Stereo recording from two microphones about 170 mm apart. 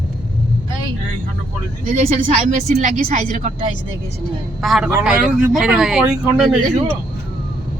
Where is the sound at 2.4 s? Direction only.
45° right (ahead or behind).